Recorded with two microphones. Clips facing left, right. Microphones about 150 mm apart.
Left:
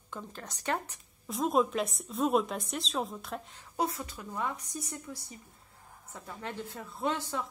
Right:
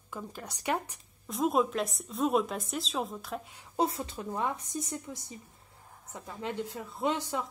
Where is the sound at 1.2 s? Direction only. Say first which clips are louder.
Even; centre (ahead or behind).